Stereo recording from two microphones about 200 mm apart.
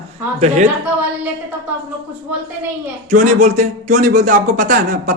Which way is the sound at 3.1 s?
40° right (ahead or behind).